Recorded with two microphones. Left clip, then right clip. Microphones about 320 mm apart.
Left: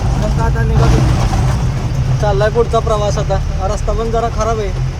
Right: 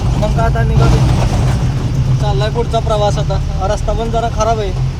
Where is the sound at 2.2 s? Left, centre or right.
Centre.